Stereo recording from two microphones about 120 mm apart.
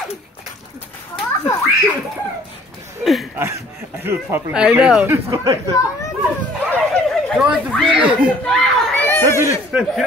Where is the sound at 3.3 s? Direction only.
20° right (ahead or behind).